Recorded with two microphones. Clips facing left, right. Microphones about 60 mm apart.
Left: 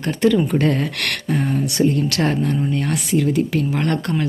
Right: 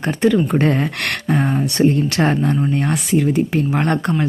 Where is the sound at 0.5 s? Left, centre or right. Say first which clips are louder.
Right 2 dB; right.